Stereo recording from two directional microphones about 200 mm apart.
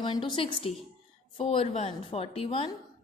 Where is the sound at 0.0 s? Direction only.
25° left (ahead or behind).